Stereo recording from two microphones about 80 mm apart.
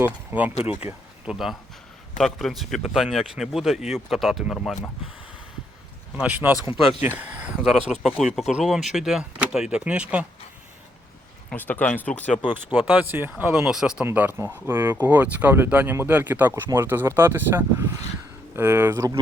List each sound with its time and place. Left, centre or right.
0.0 s speech: right
1.2 s speech: centre
6.3 s speech: right
8.2 s speech: centre
11.5 s speech: left
12.7 s speech: centre
13.7 s speech: centre
14.0 s speech: right